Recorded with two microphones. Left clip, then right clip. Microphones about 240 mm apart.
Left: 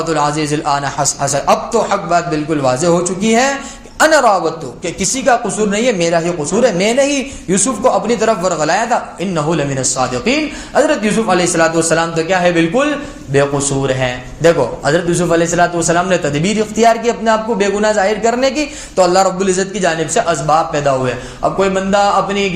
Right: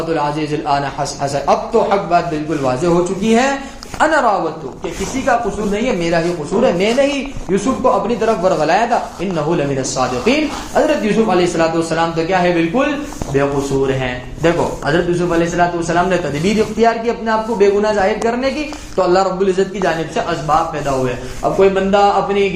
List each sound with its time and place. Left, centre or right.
0.2 s a man's voice: left
5.3 s a man's voice: left
10.8 s a man's voice: left
21.6 s a man's voice: left